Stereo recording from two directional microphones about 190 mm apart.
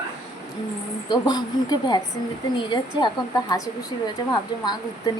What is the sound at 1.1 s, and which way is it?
Speech, 20° left (ahead or behind).